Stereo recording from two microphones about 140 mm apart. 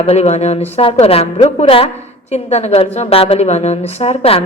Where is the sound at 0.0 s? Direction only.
45° left (ahead or behind).